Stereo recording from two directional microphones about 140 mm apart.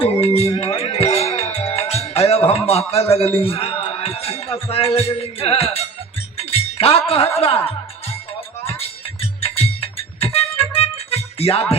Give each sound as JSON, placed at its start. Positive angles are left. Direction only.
{"t": 0.0, "sound": "music", "side_deg": 45}
{"t": 2.0, "sound": "a man's voice", "side_deg": 45}
{"t": 6.3, "sound": "wind chime", "side_deg": 45}
{"t": 7.3, "sound": "music", "side_deg": 45}
{"t": 9.2, "sound": "music", "side_deg": 45}